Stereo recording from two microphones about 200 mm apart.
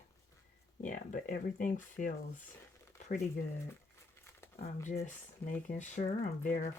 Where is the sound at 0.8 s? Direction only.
40° left (ahead or behind).